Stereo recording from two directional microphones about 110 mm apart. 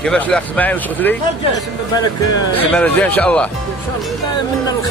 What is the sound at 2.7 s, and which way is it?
Speech, 10° left (ahead or behind).